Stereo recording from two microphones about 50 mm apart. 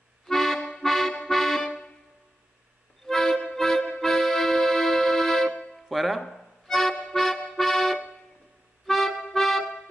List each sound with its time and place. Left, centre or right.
0.3 s accordion: centre
0.6 s accordion: left
0.8 s music: centre
3.1 s music: centre
4.0 s accordion: centre
5.9 s music: centre
8.8 s accordion: centre
9.3 s music: centre